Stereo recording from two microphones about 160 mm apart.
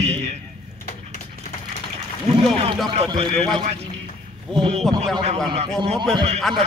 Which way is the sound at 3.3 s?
5° left (ahead or behind).